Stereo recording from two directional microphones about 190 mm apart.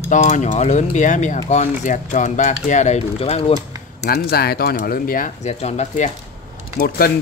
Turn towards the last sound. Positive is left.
turn(degrees=50)  # may be behind; listen again after turning